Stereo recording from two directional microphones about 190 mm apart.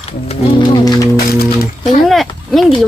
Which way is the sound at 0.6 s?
20° left (ahead or behind).